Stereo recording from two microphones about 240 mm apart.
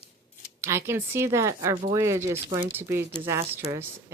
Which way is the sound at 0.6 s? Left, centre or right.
Centre.